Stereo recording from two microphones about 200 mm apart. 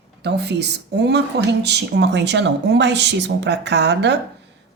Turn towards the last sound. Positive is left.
turn(degrees=-60)  # may be behind; listen again after turning